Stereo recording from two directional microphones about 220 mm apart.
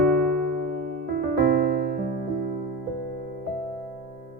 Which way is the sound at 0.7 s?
40° right (ahead or behind).